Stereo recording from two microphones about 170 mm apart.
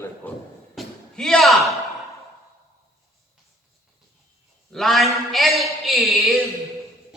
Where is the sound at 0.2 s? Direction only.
10° left (ahead or behind).